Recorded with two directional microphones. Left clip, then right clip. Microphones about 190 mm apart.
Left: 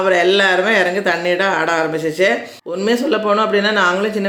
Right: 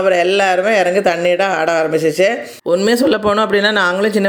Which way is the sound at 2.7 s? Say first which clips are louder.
Right 3 dB; 45° right (ahead or behind).